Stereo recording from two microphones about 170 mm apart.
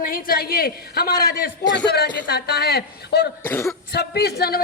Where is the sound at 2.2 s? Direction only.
70° left (ahead or behind).